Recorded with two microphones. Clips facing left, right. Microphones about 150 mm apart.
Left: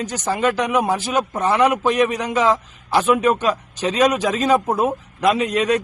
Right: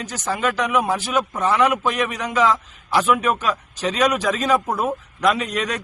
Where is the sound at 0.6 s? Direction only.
40° left (ahead or behind).